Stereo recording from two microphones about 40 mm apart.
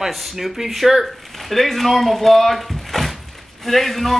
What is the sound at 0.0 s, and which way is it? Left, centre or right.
A man's voice, centre.